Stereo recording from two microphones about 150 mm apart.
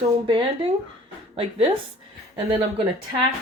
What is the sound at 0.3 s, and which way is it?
Speech, 35° right (ahead or behind).